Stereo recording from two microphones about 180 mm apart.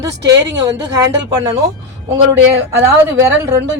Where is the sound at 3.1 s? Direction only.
15° right (ahead or behind).